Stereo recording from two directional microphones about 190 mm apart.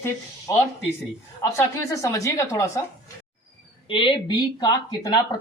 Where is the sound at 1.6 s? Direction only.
15° left (ahead or behind).